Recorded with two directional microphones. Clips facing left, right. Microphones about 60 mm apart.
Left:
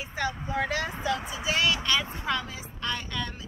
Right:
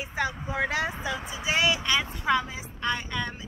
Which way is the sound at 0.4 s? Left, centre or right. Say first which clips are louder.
Right 1 dB; centre.